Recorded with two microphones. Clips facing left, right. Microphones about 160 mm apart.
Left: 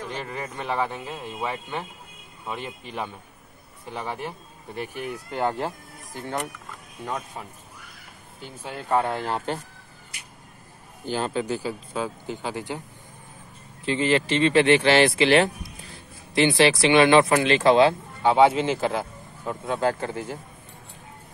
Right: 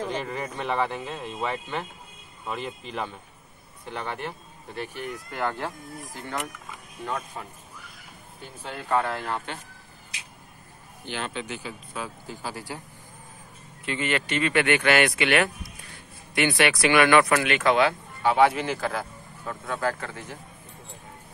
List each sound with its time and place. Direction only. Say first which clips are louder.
0.1 s a man's voice: right 2 dB; centre (ahead or behind)
7.1 s a man's voice: even; 10° left (ahead or behind)
8.6 s a man's voice: left 2 dB; 15° left (ahead or behind)
9.0 s speech: left 3 dB; 30° left (ahead or behind)
11.1 s speech: left 7 dB; 40° left (ahead or behind); by 12.8 s 20° left (ahead or behind)
13.8 s speech: left 6 dB; 30° left (ahead or behind)